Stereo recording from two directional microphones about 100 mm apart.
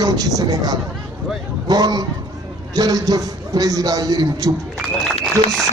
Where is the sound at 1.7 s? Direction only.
40° right (ahead or behind).